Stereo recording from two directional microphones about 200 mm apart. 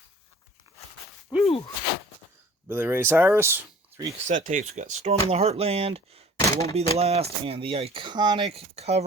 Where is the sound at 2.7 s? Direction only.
10° right (ahead or behind).